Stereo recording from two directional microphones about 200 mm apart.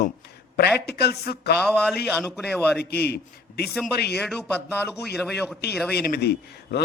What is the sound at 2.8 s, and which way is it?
Speech, 50° left (ahead or behind).